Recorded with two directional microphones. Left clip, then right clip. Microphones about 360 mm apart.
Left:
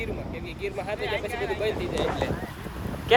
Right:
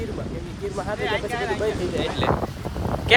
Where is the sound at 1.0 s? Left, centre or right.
Right.